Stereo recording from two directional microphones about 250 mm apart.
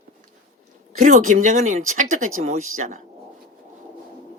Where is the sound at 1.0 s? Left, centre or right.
Right.